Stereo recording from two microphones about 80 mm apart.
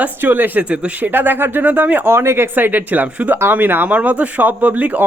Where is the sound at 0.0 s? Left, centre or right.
Right.